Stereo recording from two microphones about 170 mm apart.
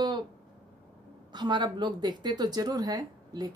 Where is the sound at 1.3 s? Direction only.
25° right (ahead or behind).